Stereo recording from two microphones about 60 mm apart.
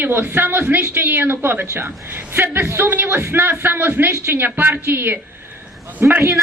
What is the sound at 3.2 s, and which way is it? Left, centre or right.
A woman's voice, right.